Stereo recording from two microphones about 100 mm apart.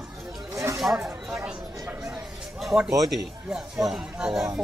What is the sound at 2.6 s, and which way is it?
Speech, 5° right (ahead or behind).